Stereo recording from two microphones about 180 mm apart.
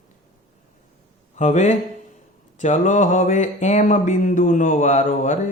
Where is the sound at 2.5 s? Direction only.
40° left (ahead or behind).